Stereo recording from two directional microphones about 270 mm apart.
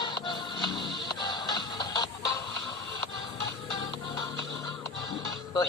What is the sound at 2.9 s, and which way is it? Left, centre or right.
Music, left.